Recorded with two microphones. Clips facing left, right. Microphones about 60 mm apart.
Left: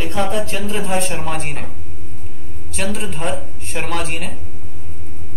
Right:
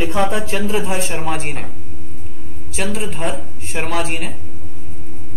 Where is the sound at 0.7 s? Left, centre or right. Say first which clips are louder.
Right 1 dB; centre.